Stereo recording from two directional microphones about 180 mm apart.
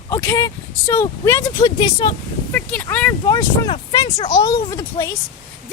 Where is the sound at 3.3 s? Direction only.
25° left (ahead or behind).